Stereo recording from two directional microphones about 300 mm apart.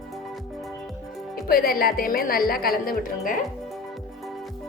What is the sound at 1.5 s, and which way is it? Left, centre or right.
Speech, left.